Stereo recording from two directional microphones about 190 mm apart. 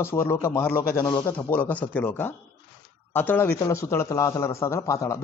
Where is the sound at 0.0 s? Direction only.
15° left (ahead or behind).